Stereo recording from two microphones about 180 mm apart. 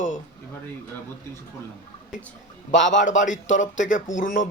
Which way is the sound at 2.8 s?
45° left (ahead or behind).